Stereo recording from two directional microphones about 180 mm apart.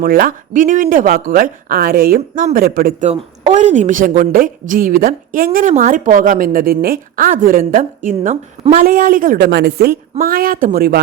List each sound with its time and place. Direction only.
0.0 s a woman's voice: 55° right (ahead or behind)
3.1 s a woman's voice: 40° right (ahead or behind)
8.8 s a woman's voice: 50° right (ahead or behind)
10.2 s a woman's voice: 55° right (ahead or behind)